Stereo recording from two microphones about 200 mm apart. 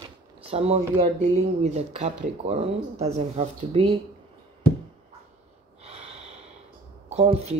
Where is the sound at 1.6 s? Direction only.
30° right (ahead or behind).